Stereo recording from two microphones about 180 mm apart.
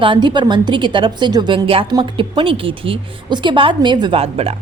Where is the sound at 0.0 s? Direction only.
25° right (ahead or behind).